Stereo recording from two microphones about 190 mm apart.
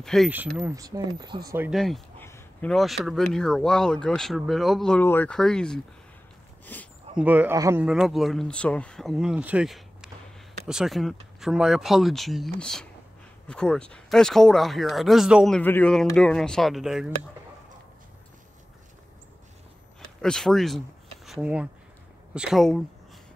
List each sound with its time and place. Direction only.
0.0 s speech: centre (ahead or behind)
0.7 s speech: 20° right (ahead or behind)
1.7 s speech: centre (ahead or behind)
2.2 s a sound: 15° left (ahead or behind)
2.7 s speech: centre (ahead or behind)
7.2 s speech: 10° right (ahead or behind)
7.8 s speech: 5° right (ahead or behind)
20.2 s speech: 5° left (ahead or behind)